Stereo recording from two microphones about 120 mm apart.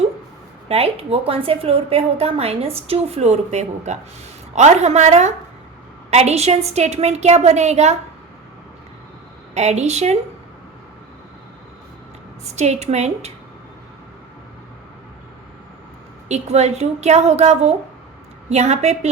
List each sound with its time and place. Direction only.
0.7 s a woman's voice: 55° right (ahead or behind); by 5.3 s 75° right (ahead or behind)
6.1 s a woman's voice: 65° right (ahead or behind)
9.6 s speech: 65° right (ahead or behind)
12.5 s speech: 65° right (ahead or behind)
16.3 s a woman's voice: 65° right (ahead or behind)